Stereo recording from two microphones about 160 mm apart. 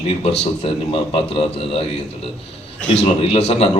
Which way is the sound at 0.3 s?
35° left (ahead or behind).